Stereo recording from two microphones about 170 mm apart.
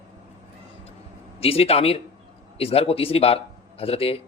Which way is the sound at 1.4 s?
35° left (ahead or behind).